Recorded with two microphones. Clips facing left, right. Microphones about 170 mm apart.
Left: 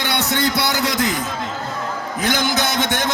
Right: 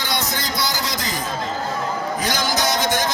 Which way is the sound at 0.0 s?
65° left (ahead or behind).